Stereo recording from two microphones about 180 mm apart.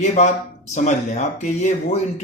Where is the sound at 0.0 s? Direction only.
40° left (ahead or behind).